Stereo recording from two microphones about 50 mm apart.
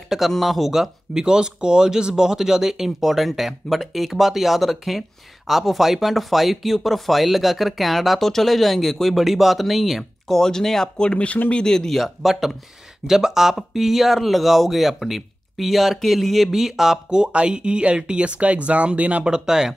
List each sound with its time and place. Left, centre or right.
0.3 s speech: centre
11.0 s speech: left; by 19.2 s right
19.2 s speech: centre